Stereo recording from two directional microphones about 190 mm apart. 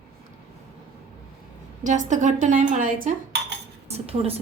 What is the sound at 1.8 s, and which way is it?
A woman's voice, 40° right (ahead or behind).